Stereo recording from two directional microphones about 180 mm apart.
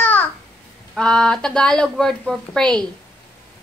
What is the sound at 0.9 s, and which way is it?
Speech, 5° left (ahead or behind).